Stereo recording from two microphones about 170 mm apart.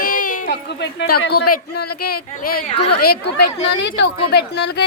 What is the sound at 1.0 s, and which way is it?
Speech, 75° left (ahead or behind).